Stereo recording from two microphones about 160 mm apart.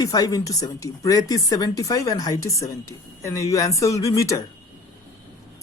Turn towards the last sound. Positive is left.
turn(degrees=20)  # may be behind; listen again after turning